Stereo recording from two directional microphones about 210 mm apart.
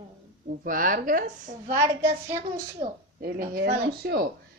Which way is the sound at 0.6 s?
40° right (ahead or behind).